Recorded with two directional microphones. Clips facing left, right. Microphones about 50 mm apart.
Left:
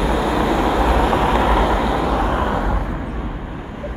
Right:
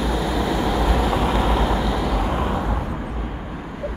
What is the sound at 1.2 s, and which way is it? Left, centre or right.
Vehicle, left.